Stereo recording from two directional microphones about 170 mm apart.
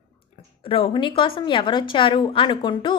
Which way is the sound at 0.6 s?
30° left (ahead or behind).